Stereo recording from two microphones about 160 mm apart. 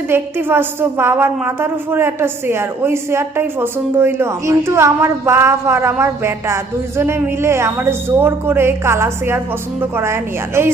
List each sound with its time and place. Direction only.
0.1 s a woman's voice: 15° right (ahead or behind)